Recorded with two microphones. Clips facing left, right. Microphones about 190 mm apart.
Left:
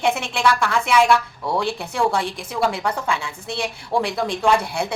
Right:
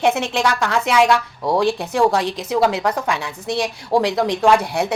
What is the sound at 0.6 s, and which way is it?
A woman's voice, 20° right (ahead or behind).